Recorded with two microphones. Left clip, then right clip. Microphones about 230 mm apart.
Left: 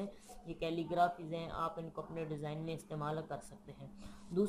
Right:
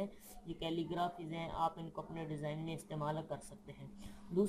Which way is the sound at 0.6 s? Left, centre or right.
Right.